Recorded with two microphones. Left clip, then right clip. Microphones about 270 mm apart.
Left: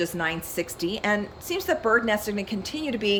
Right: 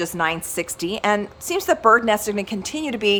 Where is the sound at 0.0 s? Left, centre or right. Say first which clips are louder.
Right 5 dB; centre.